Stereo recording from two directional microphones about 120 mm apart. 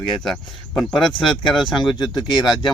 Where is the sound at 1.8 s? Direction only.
40° left (ahead or behind).